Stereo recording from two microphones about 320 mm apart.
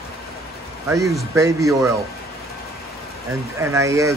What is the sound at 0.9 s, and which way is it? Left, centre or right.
Speech, centre.